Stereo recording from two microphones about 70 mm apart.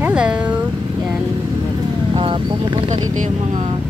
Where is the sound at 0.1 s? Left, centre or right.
Centre.